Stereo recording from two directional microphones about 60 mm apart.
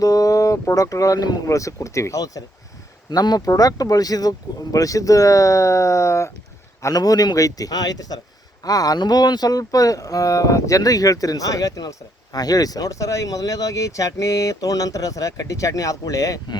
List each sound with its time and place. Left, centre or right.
0.0 s a sound: left
0.8 s speech: left
3.2 s speech: left
6.8 s a man's voice: left